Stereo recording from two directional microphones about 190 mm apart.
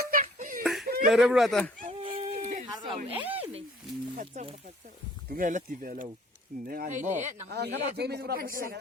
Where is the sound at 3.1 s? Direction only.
10° right (ahead or behind).